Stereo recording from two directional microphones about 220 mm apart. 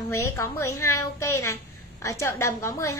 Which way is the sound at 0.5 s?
90° left.